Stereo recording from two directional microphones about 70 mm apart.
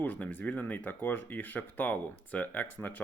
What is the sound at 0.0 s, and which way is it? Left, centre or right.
Speech, left.